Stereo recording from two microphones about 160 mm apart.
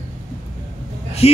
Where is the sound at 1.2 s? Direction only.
40° left (ahead or behind).